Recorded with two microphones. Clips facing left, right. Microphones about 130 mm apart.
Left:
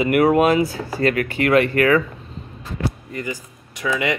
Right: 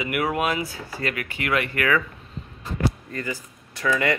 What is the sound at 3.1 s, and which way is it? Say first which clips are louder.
Speech: left 2 dB; 15° left (ahead or behind).